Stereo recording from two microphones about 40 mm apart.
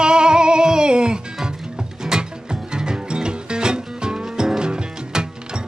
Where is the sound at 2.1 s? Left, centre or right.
Centre.